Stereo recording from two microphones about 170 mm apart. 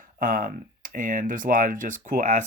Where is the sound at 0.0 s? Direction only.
55° right (ahead or behind).